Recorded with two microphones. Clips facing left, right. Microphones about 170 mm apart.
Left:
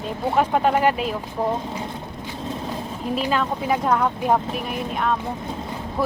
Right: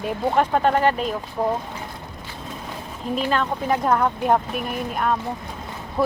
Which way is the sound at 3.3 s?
5° left (ahead or behind).